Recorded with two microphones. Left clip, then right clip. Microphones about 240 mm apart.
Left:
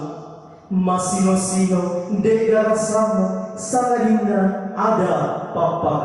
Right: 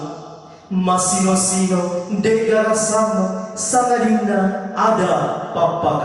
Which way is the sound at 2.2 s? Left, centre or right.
Centre.